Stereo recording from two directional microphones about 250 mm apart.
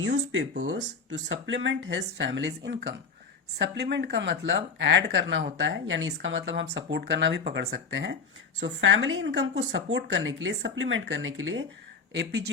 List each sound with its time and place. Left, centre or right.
0.0 s speech: right